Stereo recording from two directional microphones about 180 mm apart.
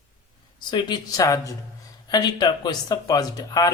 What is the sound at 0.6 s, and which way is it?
Speech, 25° left (ahead or behind).